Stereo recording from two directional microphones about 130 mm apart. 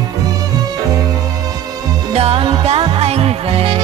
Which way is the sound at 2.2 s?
50° right (ahead or behind).